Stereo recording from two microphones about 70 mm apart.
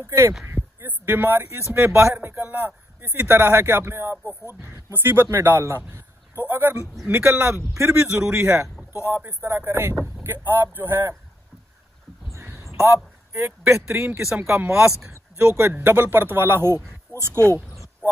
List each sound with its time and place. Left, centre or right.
0.0 s a man's voice: right
0.5 s a sound: right
1.0 s a man's voice: right
9.4 s speech: right
12.3 s a sound: right
12.8 s a man's voice: right
18.0 s speech: right